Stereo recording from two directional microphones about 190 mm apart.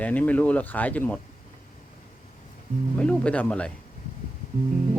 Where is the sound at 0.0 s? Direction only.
10° left (ahead or behind).